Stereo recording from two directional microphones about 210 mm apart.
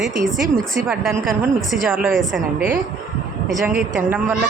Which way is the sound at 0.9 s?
Centre (ahead or behind).